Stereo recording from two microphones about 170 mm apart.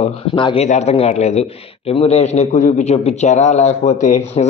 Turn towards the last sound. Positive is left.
turn(degrees=45)  # may be behind; listen again after turning